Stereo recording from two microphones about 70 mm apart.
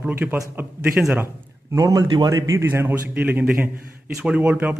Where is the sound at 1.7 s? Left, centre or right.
Right.